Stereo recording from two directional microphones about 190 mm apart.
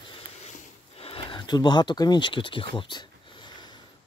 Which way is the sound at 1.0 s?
30° left (ahead or behind).